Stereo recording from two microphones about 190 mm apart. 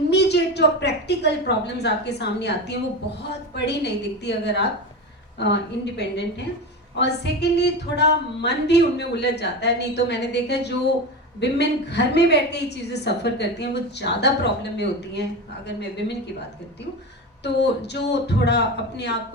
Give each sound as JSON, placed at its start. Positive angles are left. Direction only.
{"t": 0.1, "sound": "a woman's voice", "side_deg": 60}
{"t": 17.4, "sound": "a woman's voice", "side_deg": 65}